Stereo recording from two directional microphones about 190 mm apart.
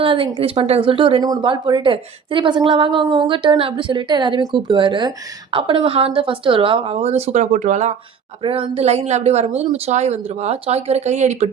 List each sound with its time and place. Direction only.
0.0 s speech: 25° right (ahead or behind)
8.4 s speech: 30° right (ahead or behind)